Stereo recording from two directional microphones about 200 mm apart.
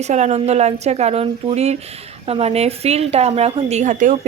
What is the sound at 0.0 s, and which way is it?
A woman's voice, 35° right (ahead or behind).